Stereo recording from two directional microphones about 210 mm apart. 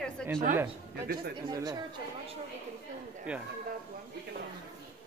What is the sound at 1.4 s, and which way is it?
Speech, 20° right (ahead or behind).